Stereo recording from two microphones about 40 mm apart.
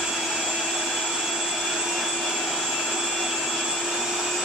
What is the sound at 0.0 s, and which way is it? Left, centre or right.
Vacuum cleaner, centre.